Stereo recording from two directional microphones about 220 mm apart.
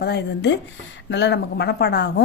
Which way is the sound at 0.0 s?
50° left (ahead or behind).